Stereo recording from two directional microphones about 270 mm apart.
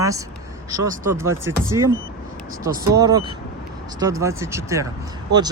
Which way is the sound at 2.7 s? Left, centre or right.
Centre.